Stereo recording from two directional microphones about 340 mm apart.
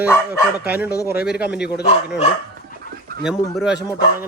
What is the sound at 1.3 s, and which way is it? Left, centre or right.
Speech, centre.